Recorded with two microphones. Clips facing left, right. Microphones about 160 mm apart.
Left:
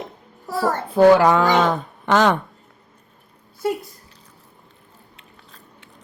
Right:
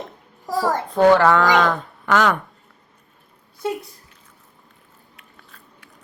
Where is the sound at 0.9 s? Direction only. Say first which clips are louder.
Left 2 dB; 5° left (ahead or behind); by 2.4 s 25° left (ahead or behind).